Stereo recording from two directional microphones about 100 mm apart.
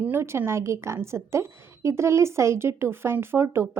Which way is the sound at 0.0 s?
20° right (ahead or behind).